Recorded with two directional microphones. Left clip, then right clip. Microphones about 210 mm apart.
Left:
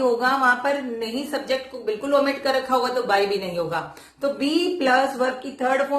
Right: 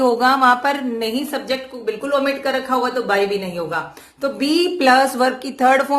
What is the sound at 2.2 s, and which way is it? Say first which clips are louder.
Speech: right 2 dB; 25° right (ahead or behind).